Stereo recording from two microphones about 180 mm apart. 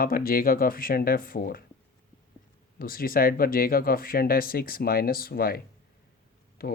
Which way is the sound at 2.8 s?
55° left (ahead or behind).